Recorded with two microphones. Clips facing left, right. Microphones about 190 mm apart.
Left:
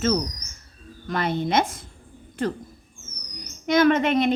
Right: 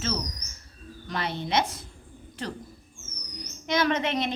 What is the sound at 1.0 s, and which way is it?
Speech, 50° left (ahead or behind).